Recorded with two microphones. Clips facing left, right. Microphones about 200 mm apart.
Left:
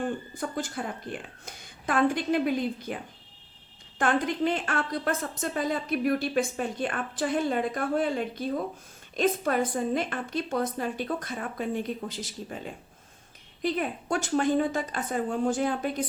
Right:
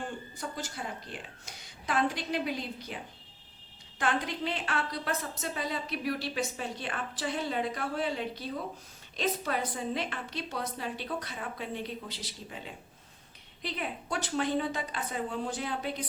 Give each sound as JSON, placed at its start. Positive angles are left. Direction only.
{"t": 0.3, "sound": "a woman's voice", "side_deg": 55}